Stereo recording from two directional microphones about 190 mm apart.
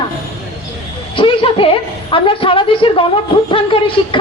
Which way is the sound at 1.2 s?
25° left (ahead or behind).